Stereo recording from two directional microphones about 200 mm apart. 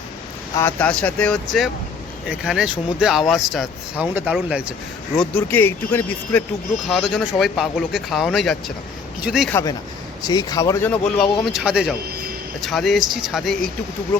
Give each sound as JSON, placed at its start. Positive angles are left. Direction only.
{"t": 0.5, "sound": "speech", "side_deg": 10}
{"t": 5.1, "sound": "speech", "side_deg": 5}
{"t": 9.5, "sound": "speech", "side_deg": 15}
{"t": 11.5, "sound": "speech", "side_deg": -5}